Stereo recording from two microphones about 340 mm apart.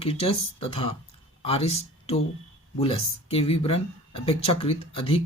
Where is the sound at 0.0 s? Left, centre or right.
Centre.